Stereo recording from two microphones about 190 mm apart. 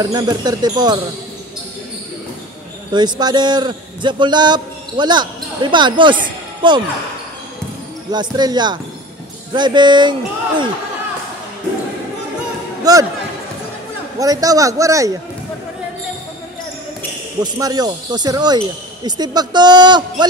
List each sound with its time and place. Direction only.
0.0 s speech: 20° right (ahead or behind)
2.9 s a man's voice: 20° right (ahead or behind)
8.1 s speech: 20° right (ahead or behind)
12.9 s speech: 20° right (ahead or behind)
14.1 s a man's voice: 20° right (ahead or behind)
17.4 s speech: 20° right (ahead or behind)